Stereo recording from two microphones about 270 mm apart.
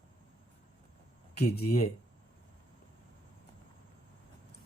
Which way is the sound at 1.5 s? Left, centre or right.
Left.